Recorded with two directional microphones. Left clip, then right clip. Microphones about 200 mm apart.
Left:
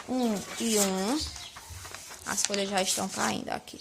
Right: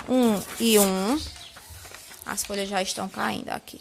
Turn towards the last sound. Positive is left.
turn(degrees=-15)  # may be behind; listen again after turning